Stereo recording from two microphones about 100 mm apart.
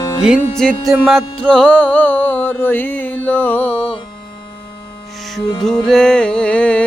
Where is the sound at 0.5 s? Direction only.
5° left (ahead or behind).